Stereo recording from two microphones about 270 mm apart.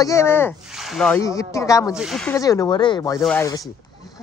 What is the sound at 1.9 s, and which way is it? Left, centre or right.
Speech, centre.